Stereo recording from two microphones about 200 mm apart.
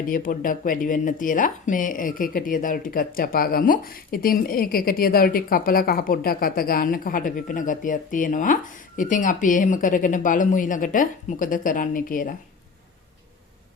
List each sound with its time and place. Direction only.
0.0 s speech: 45° left (ahead or behind)